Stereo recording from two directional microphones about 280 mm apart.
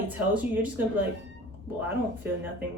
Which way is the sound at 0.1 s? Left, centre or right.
Centre.